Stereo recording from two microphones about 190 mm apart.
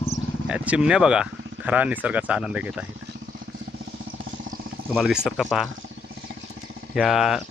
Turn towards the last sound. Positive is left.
turn(degrees=0)  # may be behind; listen again after turning